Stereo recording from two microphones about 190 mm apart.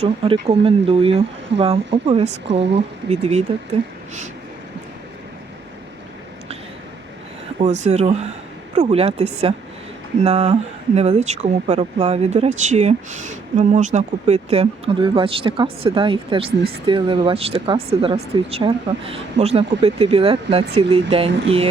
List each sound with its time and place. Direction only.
0.4 s speech: 30° right (ahead or behind)
7.6 s speech: 35° right (ahead or behind)
16.5 s speech: 55° right (ahead or behind)
16.8 s speech: 25° right (ahead or behind)